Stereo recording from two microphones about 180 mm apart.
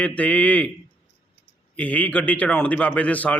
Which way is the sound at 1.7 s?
10° left (ahead or behind).